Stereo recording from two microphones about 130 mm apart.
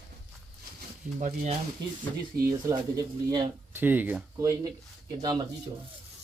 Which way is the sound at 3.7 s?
15° right (ahead or behind).